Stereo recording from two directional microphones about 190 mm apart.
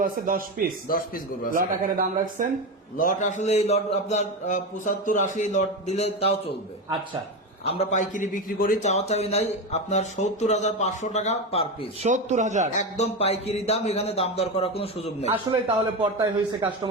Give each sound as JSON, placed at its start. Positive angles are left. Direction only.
{"t": 0.0, "sound": "a man's voice", "side_deg": -45}
{"t": 0.9, "sound": "a man's voice", "side_deg": 50}
{"t": 1.5, "sound": "a man's voice", "side_deg": -50}
{"t": 3.0, "sound": "a man's voice", "side_deg": 45}
{"t": 7.6, "sound": "a man's voice", "side_deg": 30}
{"t": 12.0, "sound": "a man's voice", "side_deg": -40}
{"t": 12.7, "sound": "a man's voice", "side_deg": 35}
{"t": 16.0, "sound": "a man's voice", "side_deg": -25}